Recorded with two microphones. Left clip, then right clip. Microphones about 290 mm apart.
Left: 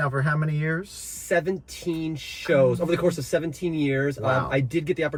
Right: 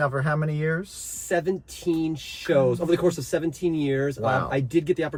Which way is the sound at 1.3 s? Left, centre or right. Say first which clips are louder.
Left 1 dB; centre.